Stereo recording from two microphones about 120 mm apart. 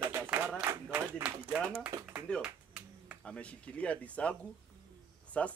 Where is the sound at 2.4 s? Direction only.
10° right (ahead or behind).